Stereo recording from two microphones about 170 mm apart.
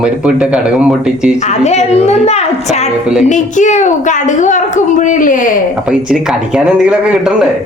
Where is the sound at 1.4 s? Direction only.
40° left (ahead or behind).